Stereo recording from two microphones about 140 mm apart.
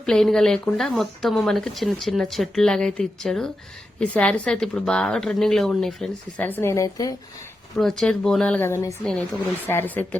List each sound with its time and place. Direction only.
0.0 s speech: 5° left (ahead or behind)
6.4 s a woman's voice: 15° left (ahead or behind)
7.8 s a woman's voice: centre (ahead or behind)